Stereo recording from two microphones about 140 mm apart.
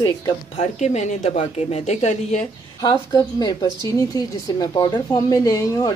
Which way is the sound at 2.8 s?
30° left (ahead or behind).